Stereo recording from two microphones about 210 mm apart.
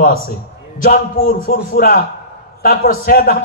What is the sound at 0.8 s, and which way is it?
A man's voice, 40° left (ahead or behind).